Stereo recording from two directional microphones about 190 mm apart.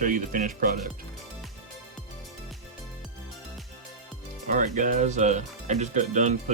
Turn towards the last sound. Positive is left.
turn(degrees=-40)  # may be behind; listen again after turning